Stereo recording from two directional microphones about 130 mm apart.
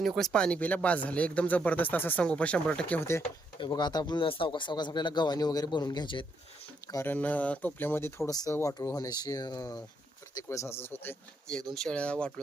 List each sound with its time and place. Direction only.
0.0 s speech: centre (ahead or behind)
3.6 s speech: 35° left (ahead or behind)
6.8 s speech: 25° left (ahead or behind)
7.1 s speech: 10° left (ahead or behind)
8.3 s speech: 30° left (ahead or behind)
11.5 s speech: 5° left (ahead or behind)